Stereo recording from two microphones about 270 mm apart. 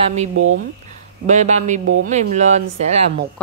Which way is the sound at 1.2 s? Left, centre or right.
Right.